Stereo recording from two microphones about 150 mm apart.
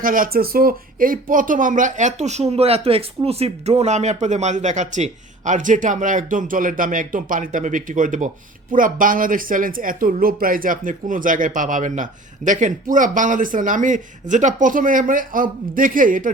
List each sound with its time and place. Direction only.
0.0 s speech: 70° right (ahead or behind)